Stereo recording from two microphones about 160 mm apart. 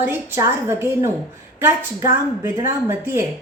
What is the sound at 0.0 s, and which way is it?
A woman's voice, 15° right (ahead or behind).